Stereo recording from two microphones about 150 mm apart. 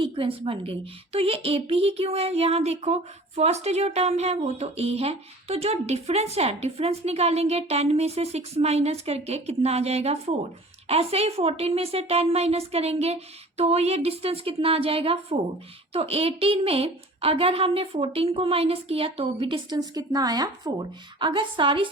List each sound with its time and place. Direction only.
0.0 s a woman's voice: 35° right (ahead or behind)
19.7 s a woman's voice: 25° right (ahead or behind)